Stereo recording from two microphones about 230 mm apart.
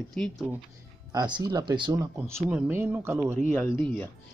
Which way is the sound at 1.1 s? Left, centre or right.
Centre.